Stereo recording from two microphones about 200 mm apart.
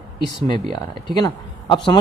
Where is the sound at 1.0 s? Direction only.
20° left (ahead or behind).